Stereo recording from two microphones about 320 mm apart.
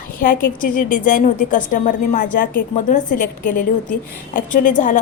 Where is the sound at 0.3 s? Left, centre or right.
Left.